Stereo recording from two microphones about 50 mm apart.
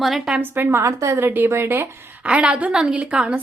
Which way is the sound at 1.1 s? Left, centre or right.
Right.